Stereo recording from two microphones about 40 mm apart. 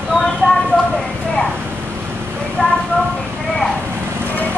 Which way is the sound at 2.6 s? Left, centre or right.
Left.